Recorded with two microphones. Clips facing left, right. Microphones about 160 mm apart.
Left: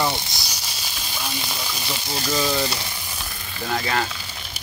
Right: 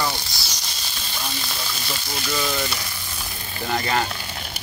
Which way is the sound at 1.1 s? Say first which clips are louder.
Left 1 dB; 10° left (ahead or behind).